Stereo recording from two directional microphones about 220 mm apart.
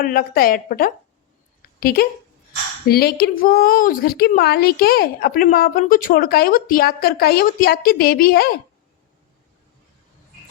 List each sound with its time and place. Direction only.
0.0 s a woman's voice: 40° left (ahead or behind)